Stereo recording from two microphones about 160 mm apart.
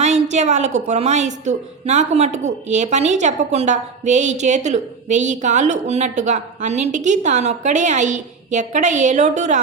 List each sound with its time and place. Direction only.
0.0 s a woman's voice: 45° right (ahead or behind)